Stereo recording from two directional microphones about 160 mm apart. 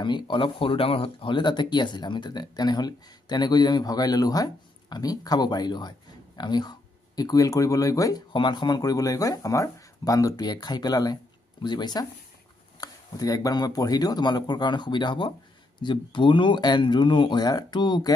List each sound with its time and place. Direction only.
0.0 s speech: 30° left (ahead or behind)